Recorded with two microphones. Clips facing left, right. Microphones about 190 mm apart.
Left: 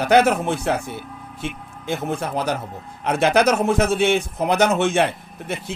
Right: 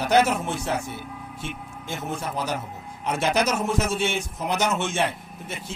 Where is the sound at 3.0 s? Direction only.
60° left (ahead or behind).